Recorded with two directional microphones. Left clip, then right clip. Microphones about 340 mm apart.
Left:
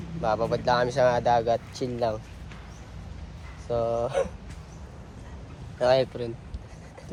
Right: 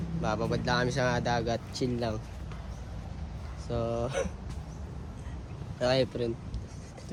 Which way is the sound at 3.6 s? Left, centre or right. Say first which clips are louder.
Left 6 dB; centre.